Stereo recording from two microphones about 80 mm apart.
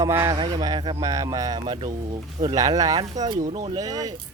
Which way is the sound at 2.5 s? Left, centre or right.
Right.